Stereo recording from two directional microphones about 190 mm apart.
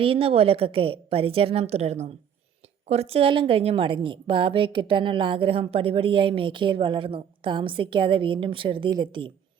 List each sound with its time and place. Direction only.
0.0 s a woman's voice: 30° right (ahead or behind)